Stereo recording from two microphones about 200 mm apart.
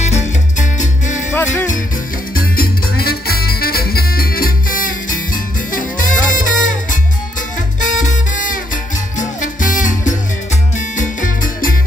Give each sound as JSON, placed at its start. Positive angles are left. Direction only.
{"t": 0.0, "sound": "salsa music", "side_deg": 35}
{"t": 1.3, "sound": "music", "side_deg": 10}
{"t": 2.3, "sound": "music", "side_deg": 45}